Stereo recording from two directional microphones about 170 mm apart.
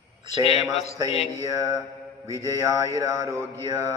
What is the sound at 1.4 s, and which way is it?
Mantra, 20° right (ahead or behind).